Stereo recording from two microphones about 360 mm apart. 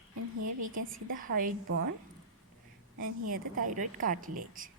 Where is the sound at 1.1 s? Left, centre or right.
Right.